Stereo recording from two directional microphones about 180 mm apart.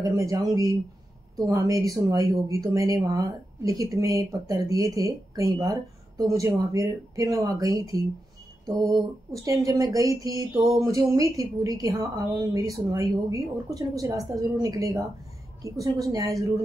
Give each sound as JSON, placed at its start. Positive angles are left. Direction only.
{"t": 0.0, "sound": "speech", "side_deg": -15}